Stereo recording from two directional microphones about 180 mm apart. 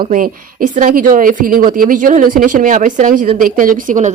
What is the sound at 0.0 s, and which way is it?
Speech, 50° right (ahead or behind).